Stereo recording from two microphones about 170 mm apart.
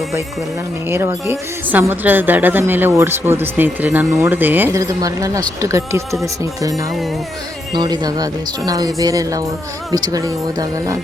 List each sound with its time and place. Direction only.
0.9 s a woman's voice: 15° right (ahead or behind)